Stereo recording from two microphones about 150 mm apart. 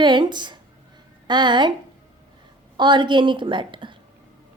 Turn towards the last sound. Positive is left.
turn(degrees=-35)  # may be behind; listen again after turning